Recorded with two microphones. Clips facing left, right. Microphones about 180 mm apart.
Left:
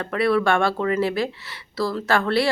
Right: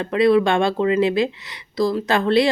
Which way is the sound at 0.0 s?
20° right (ahead or behind).